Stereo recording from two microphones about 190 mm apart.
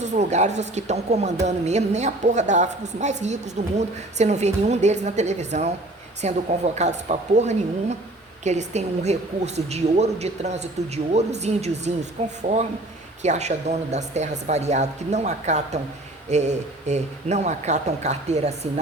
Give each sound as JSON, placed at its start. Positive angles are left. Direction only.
{"t": 0.0, "sound": "a woman's voice", "side_deg": -35}